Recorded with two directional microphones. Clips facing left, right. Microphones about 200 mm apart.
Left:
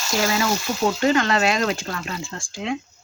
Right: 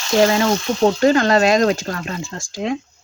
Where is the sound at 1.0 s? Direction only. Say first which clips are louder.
Right 4 dB; 40° right (ahead or behind).